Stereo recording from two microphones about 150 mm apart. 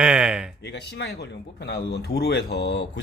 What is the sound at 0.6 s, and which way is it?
Speech, 90° left.